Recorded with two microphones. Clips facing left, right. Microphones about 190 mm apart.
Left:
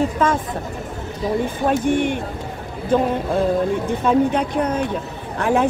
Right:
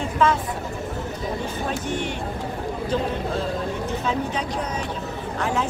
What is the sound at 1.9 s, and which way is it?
Speech, 55° left (ahead or behind).